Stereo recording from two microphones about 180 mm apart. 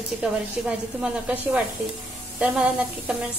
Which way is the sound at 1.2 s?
5° right (ahead or behind).